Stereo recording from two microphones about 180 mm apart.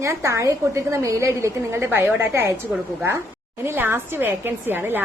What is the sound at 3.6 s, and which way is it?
A woman's voice, 10° right (ahead or behind).